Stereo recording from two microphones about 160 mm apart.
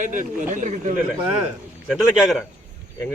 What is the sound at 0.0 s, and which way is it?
Speech, 55° right (ahead or behind).